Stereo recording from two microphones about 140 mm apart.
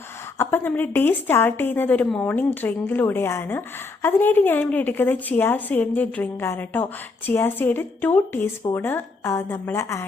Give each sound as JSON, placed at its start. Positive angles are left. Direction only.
{"t": 0.3, "sound": "a woman's voice", "side_deg": 15}